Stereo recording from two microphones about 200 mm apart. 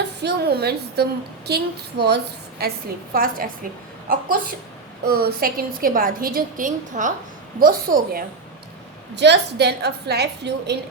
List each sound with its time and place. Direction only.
0.2 s a woman's voice: 55° right (ahead or behind)
5.0 s a woman's voice: 50° right (ahead or behind)
9.1 s a woman's voice: 60° right (ahead or behind)